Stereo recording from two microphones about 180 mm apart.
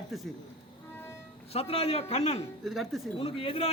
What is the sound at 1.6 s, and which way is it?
Speech, 30° left (ahead or behind).